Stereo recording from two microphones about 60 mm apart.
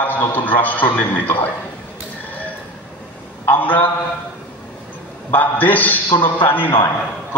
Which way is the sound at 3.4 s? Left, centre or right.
Left.